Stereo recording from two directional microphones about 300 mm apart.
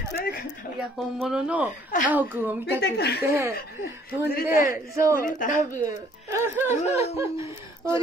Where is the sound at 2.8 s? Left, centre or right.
Left.